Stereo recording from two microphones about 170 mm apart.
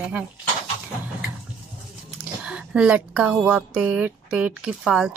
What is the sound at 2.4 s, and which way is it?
Speech, 5° right (ahead or behind).